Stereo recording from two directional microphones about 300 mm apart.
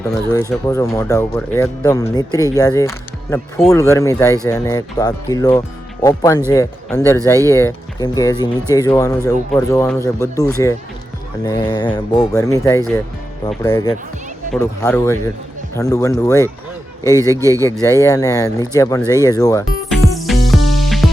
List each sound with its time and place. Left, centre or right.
0.0 s speech: centre
17.3 s speech: centre
17.6 s speech: centre
19.9 s music: centre